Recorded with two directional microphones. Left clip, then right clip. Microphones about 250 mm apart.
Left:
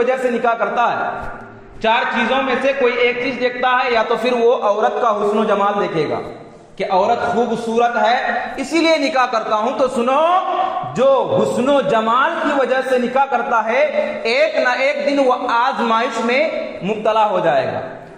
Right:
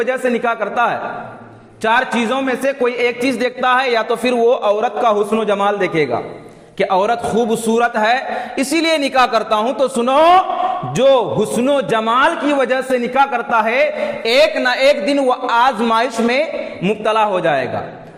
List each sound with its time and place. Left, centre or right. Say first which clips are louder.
0.0 s a man's voice: left 1 dB; right